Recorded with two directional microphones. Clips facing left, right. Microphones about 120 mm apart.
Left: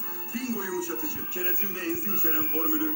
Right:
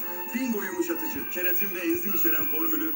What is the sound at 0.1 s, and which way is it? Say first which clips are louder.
Music: right 5 dB; 60° right (ahead or behind).